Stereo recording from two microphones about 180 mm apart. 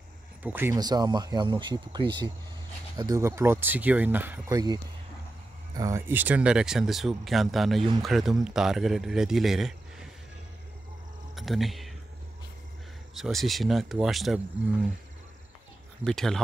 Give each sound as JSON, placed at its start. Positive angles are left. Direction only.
{"t": 0.4, "sound": "speech", "side_deg": -10}
{"t": 0.7, "sound": "speech", "side_deg": -20}
{"t": 5.8, "sound": "speech", "side_deg": -15}
{"t": 11.3, "sound": "speech", "side_deg": 0}
{"t": 13.1, "sound": "speech", "side_deg": 0}
{"t": 16.0, "sound": "speech", "side_deg": 0}